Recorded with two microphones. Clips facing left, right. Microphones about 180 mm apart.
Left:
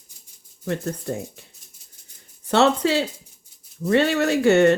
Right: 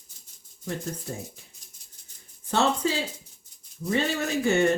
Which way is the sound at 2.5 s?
75° left (ahead or behind).